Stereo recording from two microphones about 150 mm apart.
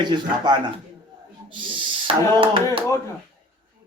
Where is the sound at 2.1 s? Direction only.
35° right (ahead or behind).